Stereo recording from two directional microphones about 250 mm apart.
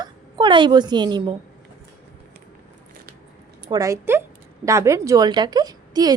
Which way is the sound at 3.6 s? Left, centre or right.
Centre.